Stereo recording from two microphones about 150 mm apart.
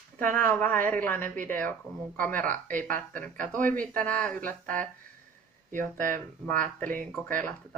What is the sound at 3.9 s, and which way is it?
Speech, 10° left (ahead or behind).